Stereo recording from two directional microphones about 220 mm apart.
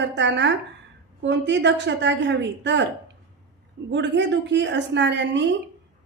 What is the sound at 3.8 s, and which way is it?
A woman's voice, 50° right (ahead or behind).